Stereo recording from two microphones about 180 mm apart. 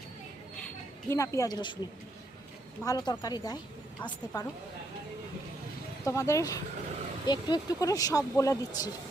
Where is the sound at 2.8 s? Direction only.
20° left (ahead or behind).